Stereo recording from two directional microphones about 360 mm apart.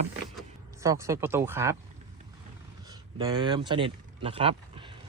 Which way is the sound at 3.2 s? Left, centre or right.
Centre.